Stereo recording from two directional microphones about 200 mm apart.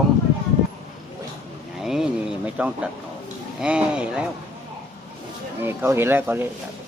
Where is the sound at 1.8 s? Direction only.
Centre (ahead or behind).